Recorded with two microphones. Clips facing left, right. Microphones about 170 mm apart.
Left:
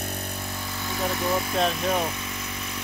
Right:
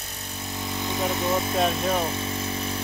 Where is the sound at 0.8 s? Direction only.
20° right (ahead or behind).